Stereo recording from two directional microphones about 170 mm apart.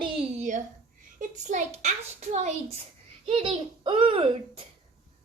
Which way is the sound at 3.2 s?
30° right (ahead or behind).